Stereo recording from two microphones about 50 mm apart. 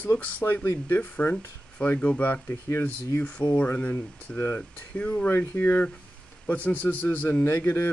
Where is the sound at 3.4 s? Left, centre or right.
Left.